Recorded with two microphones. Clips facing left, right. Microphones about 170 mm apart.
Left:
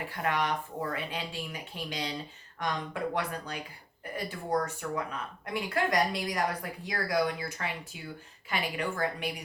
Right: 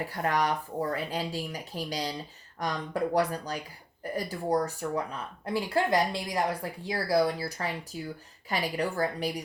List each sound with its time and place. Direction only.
0.0 s a woman's voice: 40° right (ahead or behind)